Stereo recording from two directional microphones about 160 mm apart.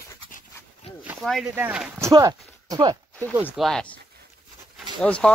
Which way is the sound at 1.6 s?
10° right (ahead or behind).